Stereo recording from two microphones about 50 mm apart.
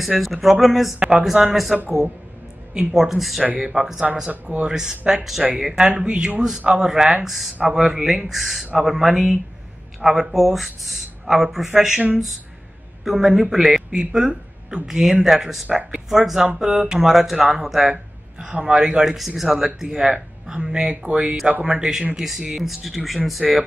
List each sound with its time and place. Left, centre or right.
0.2 s speech: centre
4.3 s speech: right; by 5.9 s centre
5.9 s speech: centre
13.0 s speech: centre
18.4 s speech: centre
19.0 s speech: centre